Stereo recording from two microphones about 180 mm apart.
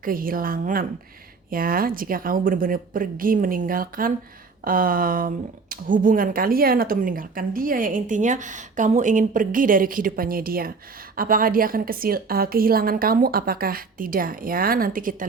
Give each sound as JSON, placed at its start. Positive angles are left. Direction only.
{"t": 0.0, "sound": "speech", "side_deg": -50}